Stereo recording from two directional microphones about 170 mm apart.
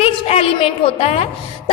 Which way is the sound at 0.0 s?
35° left (ahead or behind).